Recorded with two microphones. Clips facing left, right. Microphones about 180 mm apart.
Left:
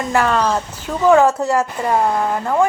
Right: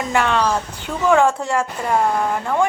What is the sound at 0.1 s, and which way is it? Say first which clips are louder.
Speech: left 2 dB; 5° left (ahead or behind).